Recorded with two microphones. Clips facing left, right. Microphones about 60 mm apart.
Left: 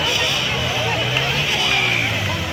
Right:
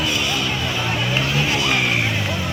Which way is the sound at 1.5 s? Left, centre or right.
Right.